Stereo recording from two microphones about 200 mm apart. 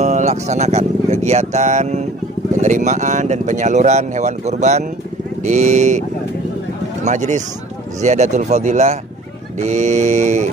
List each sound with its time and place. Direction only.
0.0 s speech: 35° right (ahead or behind)